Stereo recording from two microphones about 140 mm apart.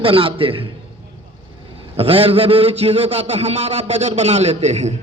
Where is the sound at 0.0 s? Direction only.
40° right (ahead or behind).